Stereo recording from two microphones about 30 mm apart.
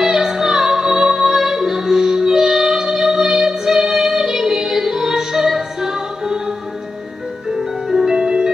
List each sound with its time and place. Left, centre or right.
0.0 s music: centre
7.5 s music: centre
8.2 s music: right